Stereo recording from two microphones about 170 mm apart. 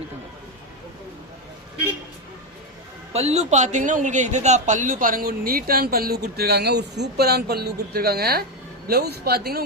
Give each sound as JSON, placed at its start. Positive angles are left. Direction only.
{"t": 3.1, "sound": "a man's voice", "side_deg": -40}